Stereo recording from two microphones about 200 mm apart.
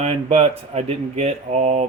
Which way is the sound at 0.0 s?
30° right (ahead or behind).